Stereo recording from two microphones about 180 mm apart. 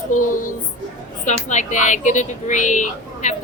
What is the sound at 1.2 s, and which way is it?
A woman's voice, 40° left (ahead or behind).